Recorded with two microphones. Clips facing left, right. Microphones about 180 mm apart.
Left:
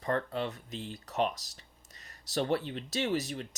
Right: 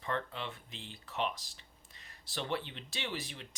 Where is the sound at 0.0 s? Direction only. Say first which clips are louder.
Left 6 dB; 40° left (ahead or behind).